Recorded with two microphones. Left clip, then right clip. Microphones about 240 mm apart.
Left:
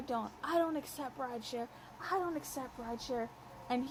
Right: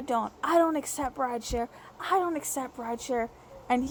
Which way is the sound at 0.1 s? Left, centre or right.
Right.